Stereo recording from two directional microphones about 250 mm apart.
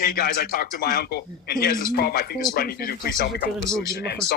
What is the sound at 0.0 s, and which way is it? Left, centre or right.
Speech, left.